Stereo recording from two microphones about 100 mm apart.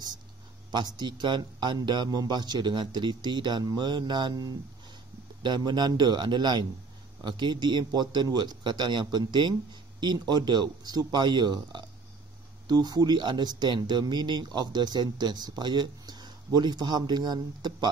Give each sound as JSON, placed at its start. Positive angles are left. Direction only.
{"t": 0.7, "sound": "speech", "side_deg": -45}